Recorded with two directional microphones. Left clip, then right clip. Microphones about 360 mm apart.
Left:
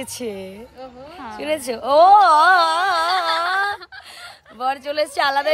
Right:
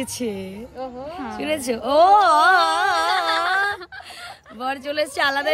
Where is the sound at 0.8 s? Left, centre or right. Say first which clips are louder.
Right 7 dB; right.